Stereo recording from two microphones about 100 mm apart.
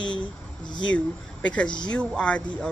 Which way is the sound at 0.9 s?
10° left (ahead or behind).